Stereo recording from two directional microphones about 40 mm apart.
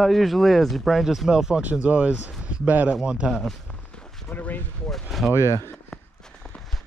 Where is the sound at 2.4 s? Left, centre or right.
Right.